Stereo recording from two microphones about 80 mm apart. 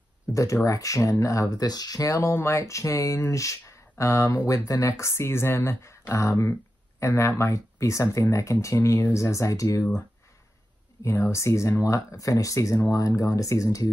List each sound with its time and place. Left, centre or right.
0.3 s speech: left
11.0 s speech: left